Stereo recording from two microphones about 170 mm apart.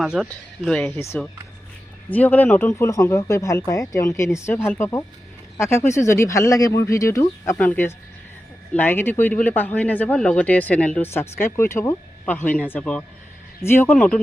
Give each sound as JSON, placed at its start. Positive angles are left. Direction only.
{"t": 0.0, "sound": "speech", "side_deg": 0}
{"t": 2.1, "sound": "speech", "side_deg": 10}